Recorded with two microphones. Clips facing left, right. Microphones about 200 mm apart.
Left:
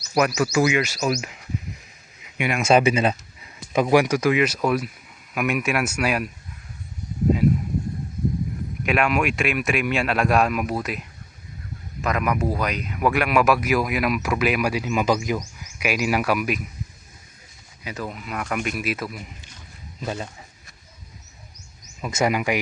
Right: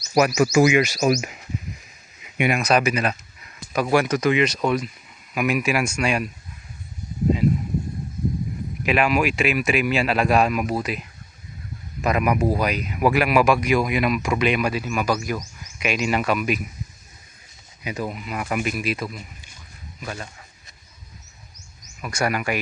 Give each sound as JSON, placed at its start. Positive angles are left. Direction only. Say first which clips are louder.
{"t": 0.2, "sound": "speech", "louder": "right 3 dB", "side_deg": -10}
{"t": 2.6, "sound": "speech", "louder": "left 7 dB", "side_deg": 25}
{"t": 8.8, "sound": "speech", "louder": "right 1 dB", "side_deg": 0}
{"t": 12.0, "sound": "speech", "louder": "right 3 dB", "side_deg": -10}
{"t": 17.8, "sound": "speech", "louder": "right 3 dB", "side_deg": -15}
{"t": 20.0, "sound": "speech", "louder": "left 4 dB", "side_deg": 25}
{"t": 22.0, "sound": "speech", "louder": "left 2 dB", "side_deg": 20}